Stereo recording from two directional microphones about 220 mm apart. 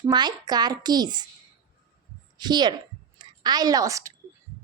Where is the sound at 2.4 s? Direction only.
20° right (ahead or behind).